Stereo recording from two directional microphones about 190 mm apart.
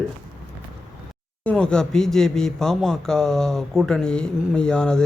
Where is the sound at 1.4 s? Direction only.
5° left (ahead or behind).